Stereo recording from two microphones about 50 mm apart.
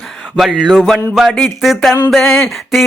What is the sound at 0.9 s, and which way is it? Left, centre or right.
Mantra, centre.